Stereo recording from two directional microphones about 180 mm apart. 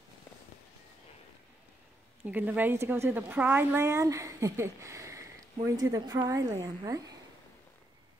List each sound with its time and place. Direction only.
2.2 s a woman's voice: 10° right (ahead or behind)